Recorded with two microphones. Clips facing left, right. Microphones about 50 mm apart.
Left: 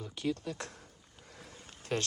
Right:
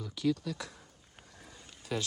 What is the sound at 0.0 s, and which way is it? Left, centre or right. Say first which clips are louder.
Speech: right 3 dB; left.